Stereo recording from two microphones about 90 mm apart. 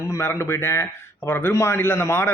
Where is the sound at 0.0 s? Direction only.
30° left (ahead or behind).